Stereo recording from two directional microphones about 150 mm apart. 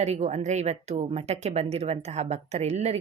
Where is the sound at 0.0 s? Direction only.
50° right (ahead or behind).